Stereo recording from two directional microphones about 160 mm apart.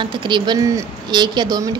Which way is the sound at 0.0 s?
30° right (ahead or behind).